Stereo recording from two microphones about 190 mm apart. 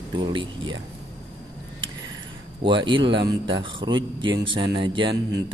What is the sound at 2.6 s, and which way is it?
Speech, 25° right (ahead or behind).